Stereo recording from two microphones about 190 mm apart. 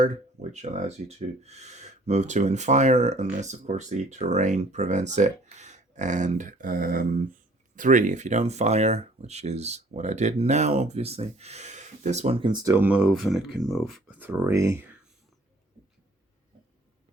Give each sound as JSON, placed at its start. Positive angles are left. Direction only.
{"t": 0.5, "sound": "speech", "side_deg": -35}
{"t": 14.2, "sound": "speech", "side_deg": -10}